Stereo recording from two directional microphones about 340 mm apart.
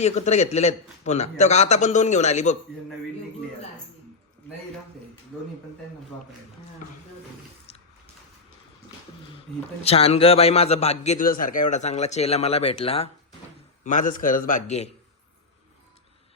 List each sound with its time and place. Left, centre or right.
0.0 s a man's voice: centre
5.3 s speech: centre
9.8 s a man's voice: centre